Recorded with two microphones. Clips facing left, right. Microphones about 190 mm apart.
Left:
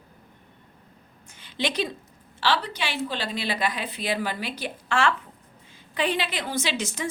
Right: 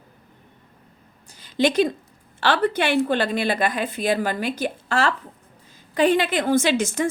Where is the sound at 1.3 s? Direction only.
40° right (ahead or behind).